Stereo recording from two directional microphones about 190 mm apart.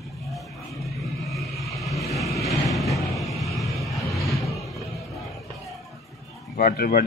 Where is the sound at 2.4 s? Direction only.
Centre (ahead or behind).